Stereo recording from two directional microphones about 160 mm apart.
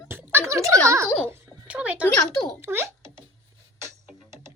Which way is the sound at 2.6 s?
15° right (ahead or behind).